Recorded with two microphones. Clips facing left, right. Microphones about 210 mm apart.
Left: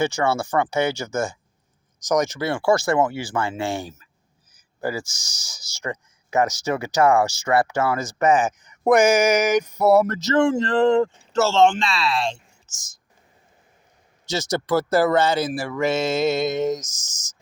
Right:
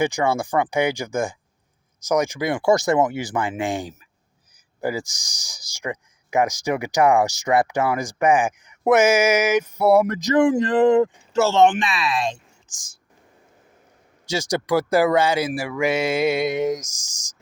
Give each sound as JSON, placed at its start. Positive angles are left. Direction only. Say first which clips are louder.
{"t": 0.0, "sound": "speech", "louder": "right 1 dB", "side_deg": -15}
{"t": 14.3, "sound": "speech", "louder": "right 1 dB", "side_deg": -10}